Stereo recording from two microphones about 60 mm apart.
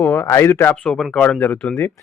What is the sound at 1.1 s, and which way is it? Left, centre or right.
Speech, left.